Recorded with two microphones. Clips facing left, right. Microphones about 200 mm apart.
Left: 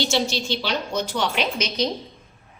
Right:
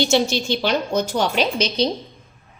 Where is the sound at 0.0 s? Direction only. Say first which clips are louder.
Right 5 dB; 50° right (ahead or behind); by 1.9 s 30° right (ahead or behind).